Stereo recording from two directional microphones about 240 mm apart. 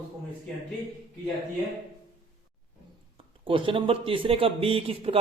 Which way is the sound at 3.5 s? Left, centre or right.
Right.